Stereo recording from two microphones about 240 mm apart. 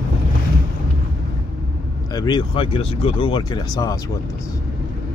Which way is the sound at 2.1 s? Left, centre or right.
Centre.